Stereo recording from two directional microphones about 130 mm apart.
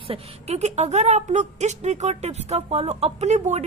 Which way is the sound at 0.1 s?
55° right (ahead or behind).